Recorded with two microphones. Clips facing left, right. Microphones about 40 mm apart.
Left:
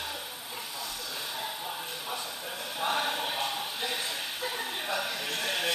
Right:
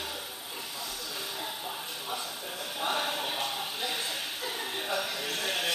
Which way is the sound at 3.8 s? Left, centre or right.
Left.